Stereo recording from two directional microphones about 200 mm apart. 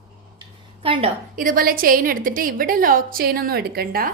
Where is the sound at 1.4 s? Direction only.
45° right (ahead or behind).